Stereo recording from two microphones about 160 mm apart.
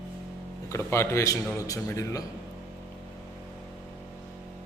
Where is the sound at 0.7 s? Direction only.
15° left (ahead or behind).